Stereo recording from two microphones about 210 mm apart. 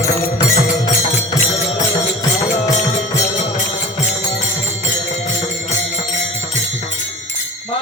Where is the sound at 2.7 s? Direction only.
35° left (ahead or behind).